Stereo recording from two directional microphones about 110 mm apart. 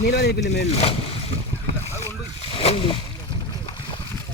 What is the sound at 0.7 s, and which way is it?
Speech, 65° left (ahead or behind).